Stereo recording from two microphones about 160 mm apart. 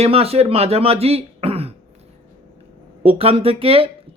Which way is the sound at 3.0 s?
35° right (ahead or behind).